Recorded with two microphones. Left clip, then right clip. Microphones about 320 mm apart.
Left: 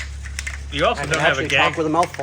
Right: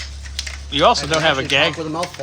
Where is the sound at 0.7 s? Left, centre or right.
Centre.